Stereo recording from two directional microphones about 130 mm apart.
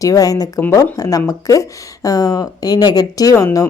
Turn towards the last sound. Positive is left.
turn(degrees=25)  # may be behind; listen again after turning